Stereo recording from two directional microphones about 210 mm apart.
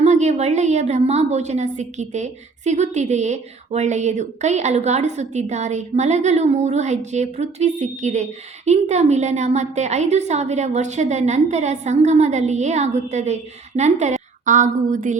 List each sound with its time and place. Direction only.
0.0 s a woman's voice: 35° right (ahead or behind)